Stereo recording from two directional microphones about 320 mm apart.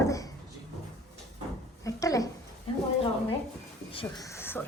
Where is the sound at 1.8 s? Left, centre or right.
Centre.